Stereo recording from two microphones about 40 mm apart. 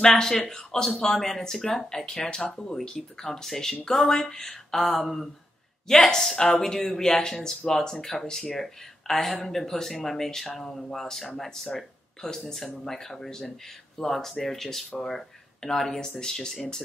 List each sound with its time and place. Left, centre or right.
0.0 s speech: centre